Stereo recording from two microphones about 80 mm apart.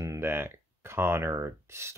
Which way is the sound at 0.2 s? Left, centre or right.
Right.